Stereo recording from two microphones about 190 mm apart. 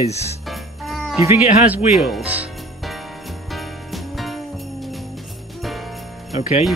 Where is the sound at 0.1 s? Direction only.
35° left (ahead or behind).